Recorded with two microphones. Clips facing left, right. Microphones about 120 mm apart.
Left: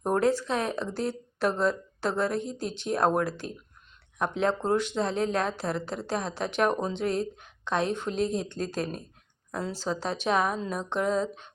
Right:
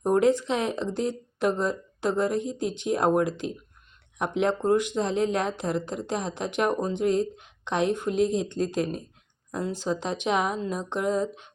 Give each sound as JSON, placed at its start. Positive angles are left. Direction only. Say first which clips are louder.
{"t": 0.1, "sound": "speech", "louder": "right 3 dB", "side_deg": -20}